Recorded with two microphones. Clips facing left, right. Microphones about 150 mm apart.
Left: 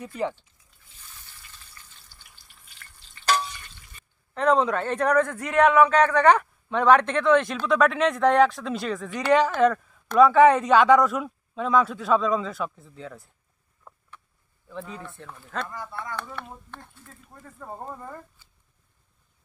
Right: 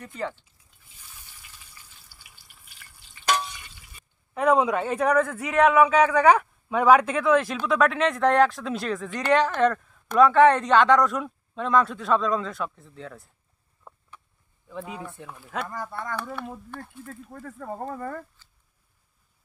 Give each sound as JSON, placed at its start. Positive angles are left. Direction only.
{"t": 0.9, "sound": "frying", "side_deg": -10}
{"t": 3.4, "sound": "speech", "side_deg": -5}
{"t": 14.7, "sound": "speech", "side_deg": -10}
{"t": 15.7, "sound": "speech", "side_deg": -45}
{"t": 16.1, "sound": "speech", "side_deg": -10}
{"t": 17.1, "sound": "speech", "side_deg": -70}
{"t": 18.4, "sound": "a sound", "side_deg": 10}